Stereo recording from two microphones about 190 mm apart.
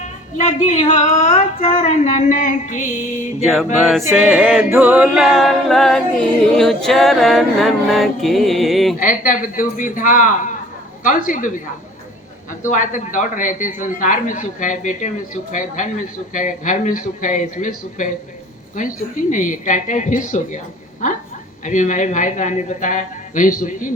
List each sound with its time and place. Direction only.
0.4 s a woman's voice: 40° left (ahead or behind)
3.4 s music: centre (ahead or behind)
9.0 s a man's voice: 45° left (ahead or behind)
12.6 s a man's voice: 45° left (ahead or behind)